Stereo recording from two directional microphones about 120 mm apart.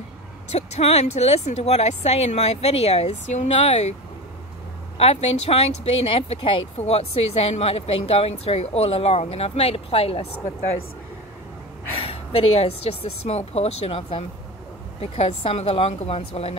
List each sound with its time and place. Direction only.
0.5 s speech: 60° left (ahead or behind)
4.9 s speech: 60° left (ahead or behind)
12.0 s speech: 50° left (ahead or behind)